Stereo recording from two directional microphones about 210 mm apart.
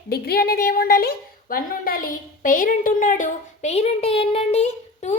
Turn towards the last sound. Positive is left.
turn(degrees=30)  # may be behind; listen again after turning